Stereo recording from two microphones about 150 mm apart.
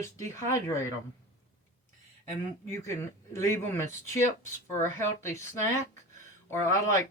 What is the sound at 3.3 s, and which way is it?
Speech, 15° left (ahead or behind).